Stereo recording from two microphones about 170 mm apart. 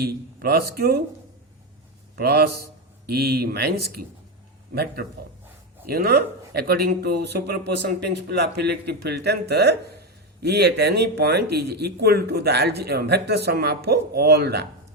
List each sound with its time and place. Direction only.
0.0 s speech: 65° right (ahead or behind)
2.1 s speech: 65° right (ahead or behind)